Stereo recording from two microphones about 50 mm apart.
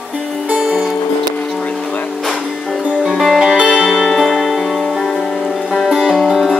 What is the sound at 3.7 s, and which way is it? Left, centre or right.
Music, centre.